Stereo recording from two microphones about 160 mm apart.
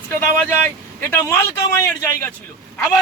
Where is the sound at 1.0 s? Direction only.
15° left (ahead or behind).